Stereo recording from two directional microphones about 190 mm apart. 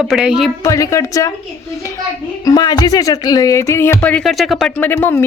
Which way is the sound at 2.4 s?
20° left (ahead or behind).